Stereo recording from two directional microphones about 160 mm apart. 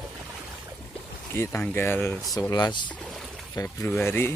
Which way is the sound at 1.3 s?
15° left (ahead or behind).